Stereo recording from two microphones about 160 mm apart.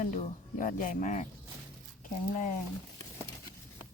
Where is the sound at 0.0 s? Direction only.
50° left (ahead or behind).